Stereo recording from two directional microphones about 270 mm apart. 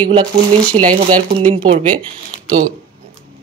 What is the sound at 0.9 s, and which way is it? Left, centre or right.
Speech, right.